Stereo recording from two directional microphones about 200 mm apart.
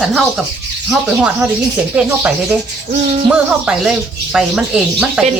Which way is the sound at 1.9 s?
5° right (ahead or behind).